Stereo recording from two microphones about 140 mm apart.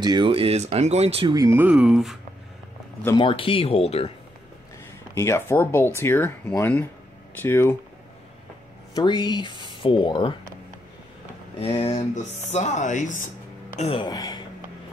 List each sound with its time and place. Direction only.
0.0 s speech: 35° right (ahead or behind)
1.3 s speech: 25° right (ahead or behind)
1.6 s speech: 10° right (ahead or behind)
3.2 s speech: 40° left (ahead or behind)
5.1 s speech: 20° left (ahead or behind)
8.9 s speech: 35° left (ahead or behind)
11.6 s speech: 45° left (ahead or behind)
12.4 s speech: 55° left (ahead or behind)
13.9 s speech: 30° left (ahead or behind)